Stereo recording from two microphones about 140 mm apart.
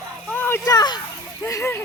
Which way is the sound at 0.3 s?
15° left (ahead or behind).